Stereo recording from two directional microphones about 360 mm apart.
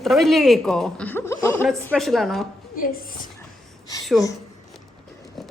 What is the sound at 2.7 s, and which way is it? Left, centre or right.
Speech, left.